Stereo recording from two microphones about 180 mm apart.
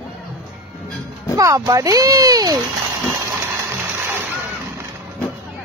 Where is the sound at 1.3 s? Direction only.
20° right (ahead or behind).